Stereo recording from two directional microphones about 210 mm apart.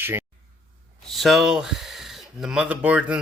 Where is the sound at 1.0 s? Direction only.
Centre (ahead or behind).